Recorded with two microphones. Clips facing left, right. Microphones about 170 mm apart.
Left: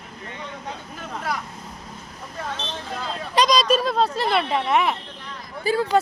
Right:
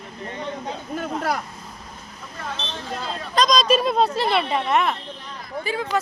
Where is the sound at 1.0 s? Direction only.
50° right (ahead or behind).